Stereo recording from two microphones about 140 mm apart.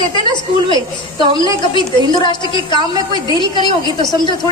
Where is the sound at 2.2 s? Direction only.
35° left (ahead or behind).